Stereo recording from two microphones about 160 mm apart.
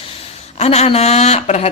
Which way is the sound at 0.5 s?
45° left (ahead or behind).